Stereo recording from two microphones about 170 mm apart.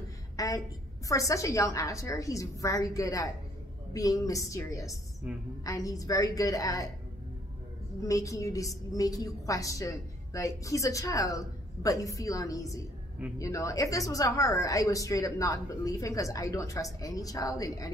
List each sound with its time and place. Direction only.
0.4 s a woman's voice: 20° left (ahead or behind)
8.1 s a woman's voice: 20° left (ahead or behind)